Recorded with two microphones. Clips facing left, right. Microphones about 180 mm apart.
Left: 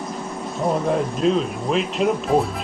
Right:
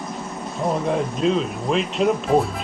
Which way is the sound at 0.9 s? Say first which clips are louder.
Left 1 dB; centre (ahead or behind).